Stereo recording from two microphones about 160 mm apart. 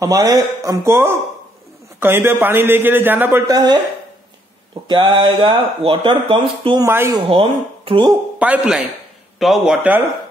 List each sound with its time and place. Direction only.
0.0 s a man's voice: 20° right (ahead or behind)
3.4 s speech: 25° right (ahead or behind)
4.8 s speech: 25° right (ahead or behind)
6.9 s a man's voice: 15° right (ahead or behind)
7.2 s speech: 35° right (ahead or behind)
8.4 s a man's voice: 10° right (ahead or behind)